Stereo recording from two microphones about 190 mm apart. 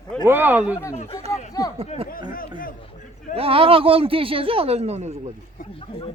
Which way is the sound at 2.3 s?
50° left (ahead or behind).